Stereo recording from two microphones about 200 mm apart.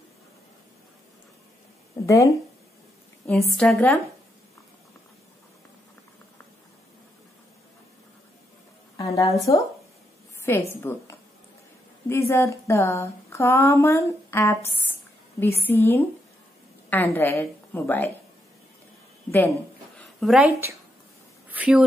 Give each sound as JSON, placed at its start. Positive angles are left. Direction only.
{"t": 2.0, "sound": "speech", "side_deg": 15}
{"t": 3.3, "sound": "a woman's voice", "side_deg": 0}
{"t": 8.9, "sound": "a sound", "side_deg": 20}
{"t": 9.4, "sound": "speech", "side_deg": 15}
{"t": 10.7, "sound": "speech", "side_deg": 10}
{"t": 20.0, "sound": "a woman's voice", "side_deg": 0}
{"t": 21.5, "sound": "a sound", "side_deg": -5}